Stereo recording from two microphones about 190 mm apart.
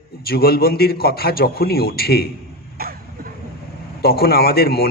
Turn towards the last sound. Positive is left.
turn(degrees=55)  # may be behind; listen again after turning